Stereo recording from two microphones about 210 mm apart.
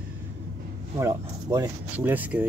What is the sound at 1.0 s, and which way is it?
Speech, 15° right (ahead or behind).